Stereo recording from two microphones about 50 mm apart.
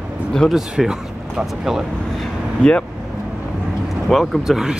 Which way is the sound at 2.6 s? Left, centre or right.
Left.